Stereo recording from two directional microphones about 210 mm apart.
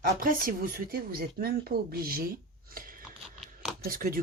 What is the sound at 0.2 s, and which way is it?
Speech, 40° right (ahead or behind).